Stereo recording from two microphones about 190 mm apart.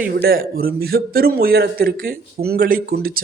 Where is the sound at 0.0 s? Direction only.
55° right (ahead or behind).